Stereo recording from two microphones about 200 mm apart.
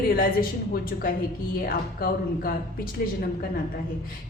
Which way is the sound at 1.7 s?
45° left (ahead or behind).